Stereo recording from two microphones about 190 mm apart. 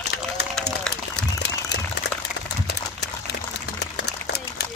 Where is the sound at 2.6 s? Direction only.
60° left (ahead or behind).